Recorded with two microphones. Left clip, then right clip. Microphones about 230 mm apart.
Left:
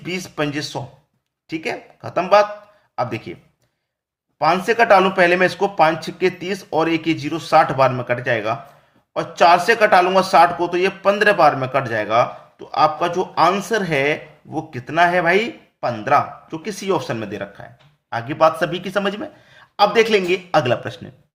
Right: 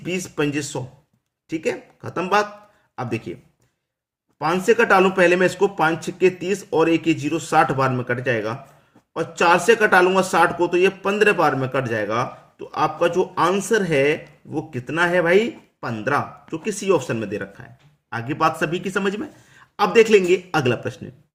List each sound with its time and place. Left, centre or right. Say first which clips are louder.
0.0 s a man's voice: even; centre
4.4 s a man's voice: left 2 dB; centre